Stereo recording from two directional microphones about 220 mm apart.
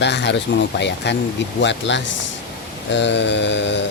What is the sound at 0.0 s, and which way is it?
Speech, 50° left (ahead or behind).